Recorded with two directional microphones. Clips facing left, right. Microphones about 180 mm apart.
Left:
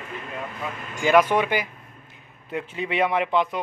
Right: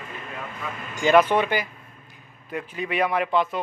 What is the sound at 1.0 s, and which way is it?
A man's voice, 10° left (ahead or behind).